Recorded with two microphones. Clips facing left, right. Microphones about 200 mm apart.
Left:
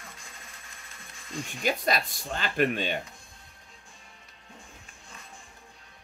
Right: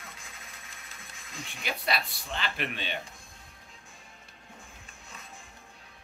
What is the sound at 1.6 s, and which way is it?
Speech, 45° left (ahead or behind).